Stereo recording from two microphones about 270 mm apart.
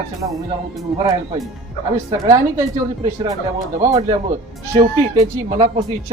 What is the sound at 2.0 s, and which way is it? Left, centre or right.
Speech, centre.